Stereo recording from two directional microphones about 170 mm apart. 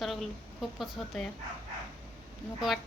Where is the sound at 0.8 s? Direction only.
Centre (ahead or behind).